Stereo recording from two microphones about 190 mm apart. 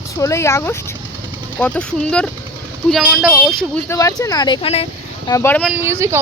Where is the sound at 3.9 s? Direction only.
15° left (ahead or behind).